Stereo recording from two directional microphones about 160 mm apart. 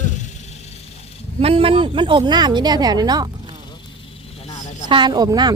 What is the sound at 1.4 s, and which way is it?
A woman's voice, 35° right (ahead or behind).